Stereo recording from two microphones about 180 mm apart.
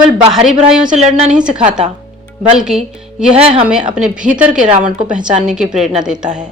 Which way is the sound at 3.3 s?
35° right (ahead or behind).